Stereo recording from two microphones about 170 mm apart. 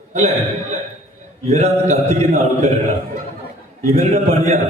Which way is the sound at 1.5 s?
40° right (ahead or behind).